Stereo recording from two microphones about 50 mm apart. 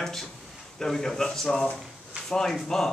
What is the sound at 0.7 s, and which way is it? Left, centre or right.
Speech, centre.